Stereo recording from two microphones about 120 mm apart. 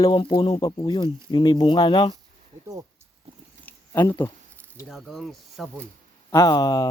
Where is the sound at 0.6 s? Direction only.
35° left (ahead or behind).